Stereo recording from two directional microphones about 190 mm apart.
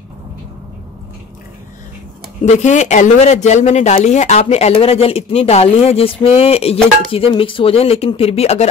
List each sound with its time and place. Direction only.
2.4 s speech: 40° left (ahead or behind)